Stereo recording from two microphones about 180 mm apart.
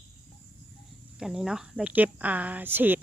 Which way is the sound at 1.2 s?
5° right (ahead or behind).